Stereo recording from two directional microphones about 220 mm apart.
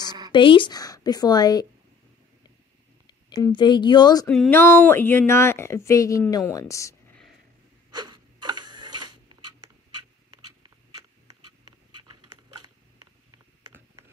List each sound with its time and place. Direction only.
0.3 s speech: 20° left (ahead or behind)
3.4 s speech: 20° left (ahead or behind)
4.3 s speech: 5° left (ahead or behind)
8.5 s tick-tock: 90° right
9.4 s a sound: 90° right